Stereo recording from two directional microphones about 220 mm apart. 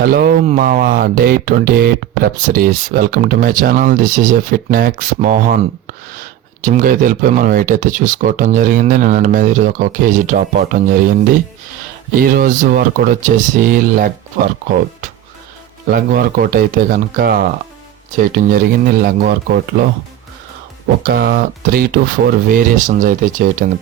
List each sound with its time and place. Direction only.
0.0 s speech: 40° right (ahead or behind)
12.1 s speech: 40° right (ahead or behind)
15.9 s speech: 40° right (ahead or behind)
21.0 s speech: 45° right (ahead or behind)